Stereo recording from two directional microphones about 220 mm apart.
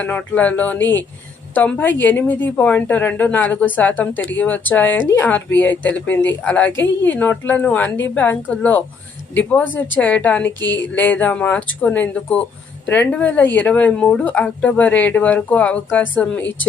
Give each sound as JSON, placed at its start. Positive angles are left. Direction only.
{"t": 0.0, "sound": "speech", "side_deg": 5}
{"t": 10.6, "sound": "a sound", "side_deg": 55}
{"t": 11.2, "sound": "speech", "side_deg": 5}